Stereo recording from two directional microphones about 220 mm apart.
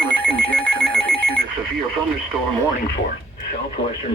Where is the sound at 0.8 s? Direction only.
5° left (ahead or behind).